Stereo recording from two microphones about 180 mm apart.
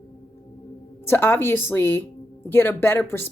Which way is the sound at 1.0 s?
15° left (ahead or behind).